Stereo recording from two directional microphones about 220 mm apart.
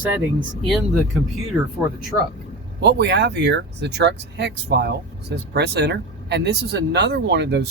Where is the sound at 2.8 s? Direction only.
50° right (ahead or behind).